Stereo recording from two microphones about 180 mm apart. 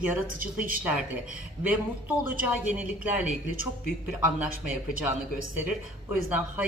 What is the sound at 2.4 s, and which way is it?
Speech, 10° right (ahead or behind).